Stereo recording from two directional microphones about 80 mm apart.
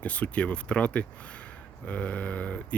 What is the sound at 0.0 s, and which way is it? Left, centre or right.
Speech, centre.